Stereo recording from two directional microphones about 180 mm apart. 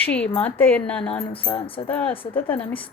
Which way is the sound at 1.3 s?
30° left (ahead or behind).